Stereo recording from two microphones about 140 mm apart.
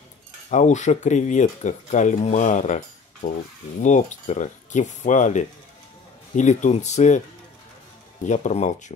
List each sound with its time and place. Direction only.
0.5 s speech: 60° left (ahead or behind)
8.3 s speech: 60° left (ahead or behind)